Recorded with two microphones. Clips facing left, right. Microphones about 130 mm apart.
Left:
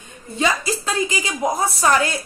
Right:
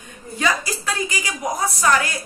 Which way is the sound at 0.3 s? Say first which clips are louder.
Left 2 dB; 25° left (ahead or behind).